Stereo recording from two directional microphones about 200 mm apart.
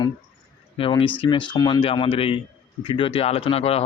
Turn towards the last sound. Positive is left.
turn(degrees=30)  # may be behind; listen again after turning